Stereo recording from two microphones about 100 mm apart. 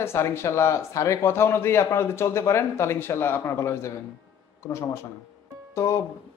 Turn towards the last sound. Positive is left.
turn(degrees=30)  # may be behind; listen again after turning